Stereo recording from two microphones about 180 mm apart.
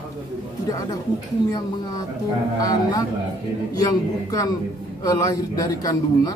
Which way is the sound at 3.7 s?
20° left (ahead or behind).